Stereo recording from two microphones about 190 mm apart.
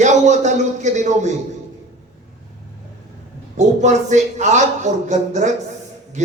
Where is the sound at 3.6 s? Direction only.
40° right (ahead or behind).